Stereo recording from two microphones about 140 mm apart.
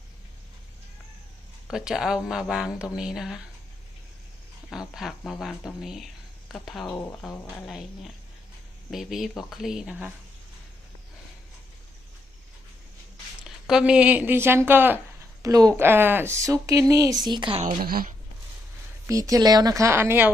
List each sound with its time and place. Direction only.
1.6 s speech: 5° right (ahead or behind)
4.7 s speech: centre (ahead or behind)
13.4 s a woman's voice: 5° right (ahead or behind)
15.4 s a woman's voice: 25° right (ahead or behind)
17.6 s a woman's voice: 80° right
19.0 s a woman's voice: 25° right (ahead or behind)